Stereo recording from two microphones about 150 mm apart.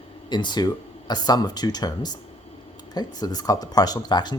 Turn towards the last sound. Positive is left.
turn(degrees=30)  # may be behind; listen again after turning